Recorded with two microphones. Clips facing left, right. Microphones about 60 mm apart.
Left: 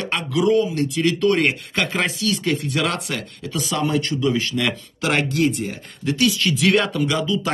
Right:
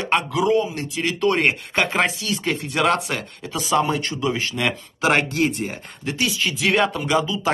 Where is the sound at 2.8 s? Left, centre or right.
Centre.